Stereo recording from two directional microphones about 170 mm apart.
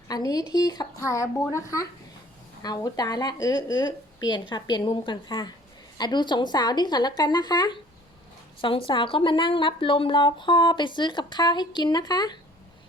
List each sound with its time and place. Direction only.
0.1 s speech: 20° left (ahead or behind)